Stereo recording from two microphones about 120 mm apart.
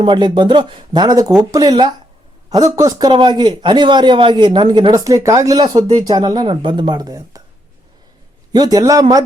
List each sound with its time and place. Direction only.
0.0 s speech: 40° right (ahead or behind)
3.1 s speech: 40° right (ahead or behind)
8.5 s speech: 30° right (ahead or behind)